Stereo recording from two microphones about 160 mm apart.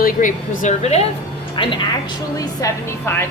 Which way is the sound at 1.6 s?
30° left (ahead or behind).